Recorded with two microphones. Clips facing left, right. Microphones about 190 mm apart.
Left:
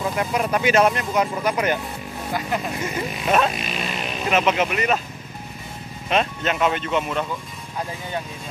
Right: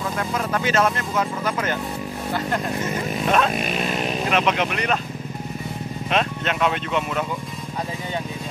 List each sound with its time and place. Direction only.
0.2 s speech: 15° left (ahead or behind)
3.5 s speech: 45° right (ahead or behind)
4.3 s speech: 5° left (ahead or behind)
6.0 s speech: centre (ahead or behind)